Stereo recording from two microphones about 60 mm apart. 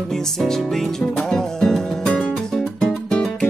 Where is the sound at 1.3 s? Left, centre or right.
Centre.